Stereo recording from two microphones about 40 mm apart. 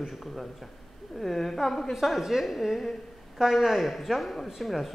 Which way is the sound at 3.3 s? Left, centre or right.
Centre.